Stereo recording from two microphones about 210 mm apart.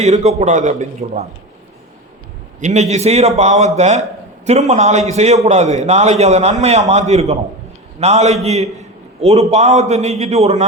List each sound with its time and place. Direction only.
0.0 s a man's voice: 30° right (ahead or behind)
2.6 s a man's voice: 35° right (ahead or behind)